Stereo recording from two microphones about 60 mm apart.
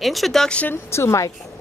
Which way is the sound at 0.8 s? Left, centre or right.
Left.